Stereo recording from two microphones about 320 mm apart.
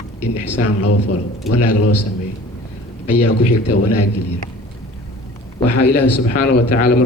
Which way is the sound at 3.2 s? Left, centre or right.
Left.